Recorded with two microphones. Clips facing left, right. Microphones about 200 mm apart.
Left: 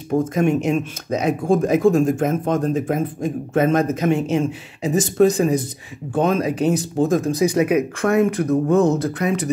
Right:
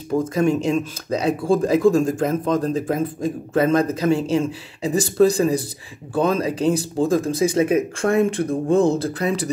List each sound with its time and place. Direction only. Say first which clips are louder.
0.2 s speech: even; 35° right (ahead or behind)